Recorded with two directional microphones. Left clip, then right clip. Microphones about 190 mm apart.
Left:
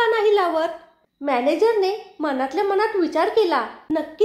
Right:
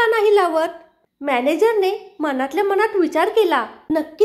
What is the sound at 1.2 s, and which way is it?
A woman's voice, 35° right (ahead or behind).